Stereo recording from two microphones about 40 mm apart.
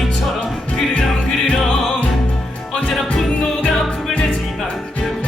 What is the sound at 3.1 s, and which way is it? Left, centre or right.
Music, centre.